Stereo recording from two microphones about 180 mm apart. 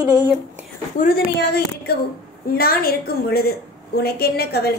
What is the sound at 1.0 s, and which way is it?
A woman's voice, 60° left (ahead or behind).